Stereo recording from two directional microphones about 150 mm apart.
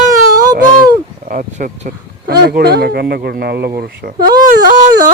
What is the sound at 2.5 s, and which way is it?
Speech, 90° right.